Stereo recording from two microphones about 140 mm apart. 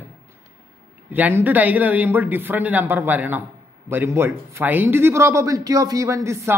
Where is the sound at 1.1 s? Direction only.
10° right (ahead or behind).